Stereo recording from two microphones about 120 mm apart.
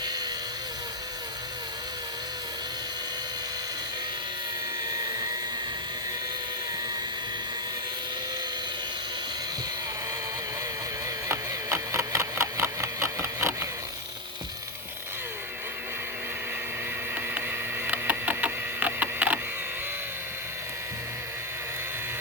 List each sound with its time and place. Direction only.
4.9 s helicopter: 30° right (ahead or behind)
11.3 s printer: 25° right (ahead or behind)
17.8 s printer: 15° right (ahead or behind)